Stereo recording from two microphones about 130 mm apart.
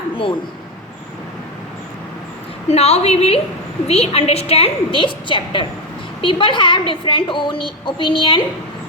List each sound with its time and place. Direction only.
2.6 s a woman's voice: 55° left (ahead or behind)